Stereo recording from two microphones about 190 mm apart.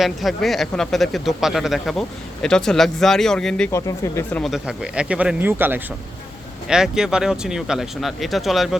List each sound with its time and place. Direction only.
0.0 s speech: centre (ahead or behind)